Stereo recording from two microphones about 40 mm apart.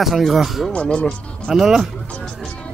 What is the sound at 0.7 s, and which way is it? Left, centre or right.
Speech, left.